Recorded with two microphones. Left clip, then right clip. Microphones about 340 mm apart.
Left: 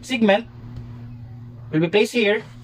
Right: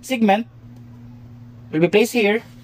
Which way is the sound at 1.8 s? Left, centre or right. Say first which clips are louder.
Right 3 dB; right.